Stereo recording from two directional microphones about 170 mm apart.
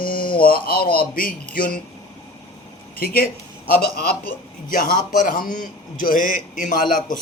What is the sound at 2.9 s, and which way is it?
A man's voice, 60° left (ahead or behind).